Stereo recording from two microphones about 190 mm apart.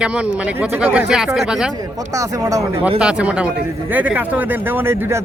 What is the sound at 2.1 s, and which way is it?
Speech, 15° right (ahead or behind).